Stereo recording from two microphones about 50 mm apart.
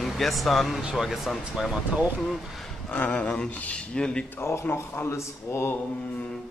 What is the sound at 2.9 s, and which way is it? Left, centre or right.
Speech, left.